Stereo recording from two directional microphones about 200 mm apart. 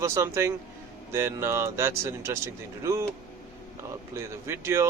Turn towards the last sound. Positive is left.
turn(degrees=-15)  # may be behind; listen again after turning